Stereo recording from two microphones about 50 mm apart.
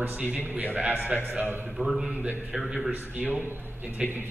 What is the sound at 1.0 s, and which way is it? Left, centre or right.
Speech, right.